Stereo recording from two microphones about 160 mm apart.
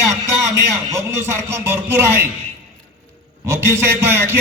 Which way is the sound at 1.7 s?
15° right (ahead or behind).